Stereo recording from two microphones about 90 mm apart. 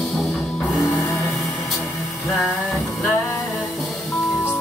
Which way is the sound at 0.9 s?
35° left (ahead or behind).